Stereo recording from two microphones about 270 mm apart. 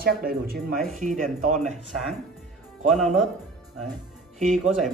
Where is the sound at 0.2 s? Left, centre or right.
Right.